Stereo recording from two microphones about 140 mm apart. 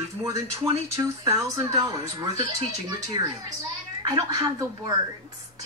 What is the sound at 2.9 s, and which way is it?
A woman's voice, 25° right (ahead or behind).